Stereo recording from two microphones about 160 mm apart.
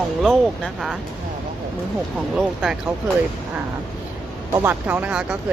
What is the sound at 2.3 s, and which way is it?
Speech, 5° right (ahead or behind).